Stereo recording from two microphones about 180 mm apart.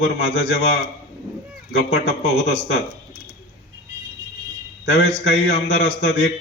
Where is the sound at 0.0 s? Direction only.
80° left.